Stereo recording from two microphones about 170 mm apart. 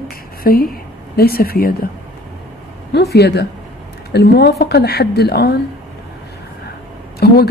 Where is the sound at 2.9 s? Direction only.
75° left (ahead or behind).